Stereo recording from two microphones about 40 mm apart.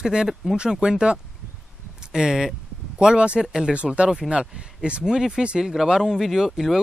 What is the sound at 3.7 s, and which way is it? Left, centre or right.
Speech, right.